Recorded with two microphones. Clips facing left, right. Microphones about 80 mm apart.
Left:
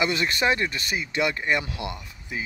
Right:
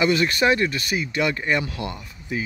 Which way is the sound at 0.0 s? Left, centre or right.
Left.